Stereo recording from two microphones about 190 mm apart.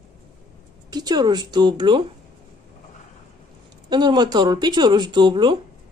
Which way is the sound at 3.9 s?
20° right (ahead or behind).